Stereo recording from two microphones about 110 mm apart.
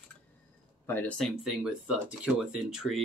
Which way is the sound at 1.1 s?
5° left (ahead or behind).